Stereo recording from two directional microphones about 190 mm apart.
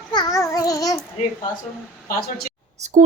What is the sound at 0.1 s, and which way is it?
Babbling, 20° left (ahead or behind).